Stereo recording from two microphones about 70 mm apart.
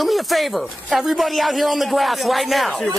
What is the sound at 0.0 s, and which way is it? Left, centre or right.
A man's voice, centre.